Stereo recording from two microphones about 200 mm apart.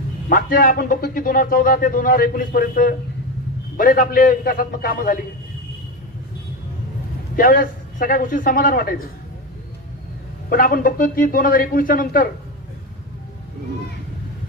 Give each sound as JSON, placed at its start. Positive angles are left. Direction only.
{"t": 0.3, "sound": "a man's voice", "side_deg": 45}
{"t": 7.3, "sound": "a man's voice", "side_deg": 45}
{"t": 10.5, "sound": "a man's voice", "side_deg": 45}